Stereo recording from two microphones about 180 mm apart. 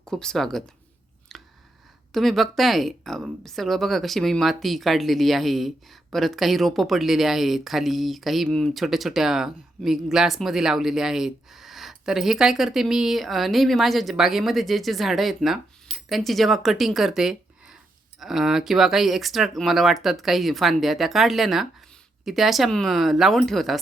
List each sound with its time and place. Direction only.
0.0 s a woman's voice: 5° left (ahead or behind)
1.3 s chewing: centre (ahead or behind)
2.1 s a woman's voice: centre (ahead or behind)